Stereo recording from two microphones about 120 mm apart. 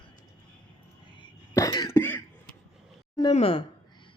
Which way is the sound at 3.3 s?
55° left (ahead or behind).